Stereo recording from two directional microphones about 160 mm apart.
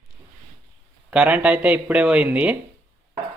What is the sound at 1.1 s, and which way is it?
Speech, 10° right (ahead or behind).